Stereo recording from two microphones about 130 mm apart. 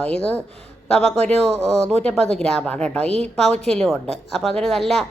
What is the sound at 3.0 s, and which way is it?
Speech, 55° right (ahead or behind).